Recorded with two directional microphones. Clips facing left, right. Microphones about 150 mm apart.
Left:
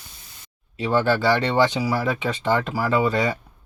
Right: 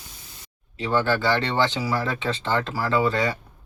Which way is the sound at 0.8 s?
20° left (ahead or behind).